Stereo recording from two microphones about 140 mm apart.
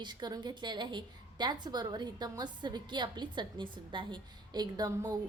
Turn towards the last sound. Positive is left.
turn(degrees=-25)  # may be behind; listen again after turning